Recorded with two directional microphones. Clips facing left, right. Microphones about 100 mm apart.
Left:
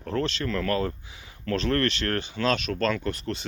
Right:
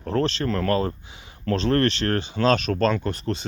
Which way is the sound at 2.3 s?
35° right (ahead or behind).